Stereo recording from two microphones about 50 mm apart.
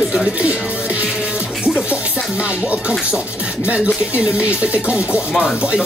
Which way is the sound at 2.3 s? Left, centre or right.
Right.